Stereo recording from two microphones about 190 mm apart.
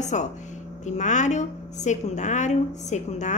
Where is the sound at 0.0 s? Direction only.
40° left (ahead or behind).